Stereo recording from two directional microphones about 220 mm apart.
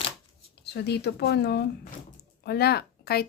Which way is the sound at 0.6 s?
50° left (ahead or behind).